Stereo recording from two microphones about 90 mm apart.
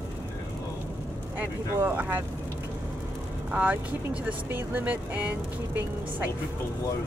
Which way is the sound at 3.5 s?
15° right (ahead or behind).